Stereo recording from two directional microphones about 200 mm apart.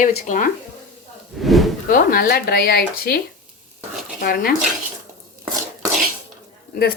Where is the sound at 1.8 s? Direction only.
45° left (ahead or behind).